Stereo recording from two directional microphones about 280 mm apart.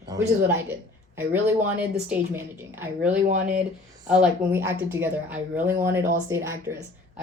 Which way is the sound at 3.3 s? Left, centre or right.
Right.